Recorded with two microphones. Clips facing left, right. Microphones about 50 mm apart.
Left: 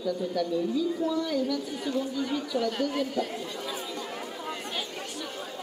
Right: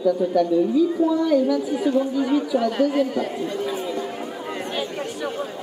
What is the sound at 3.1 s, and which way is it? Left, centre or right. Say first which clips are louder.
Speech: right 7 dB; right.